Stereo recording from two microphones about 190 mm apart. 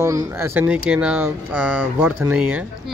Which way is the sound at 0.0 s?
15° right (ahead or behind).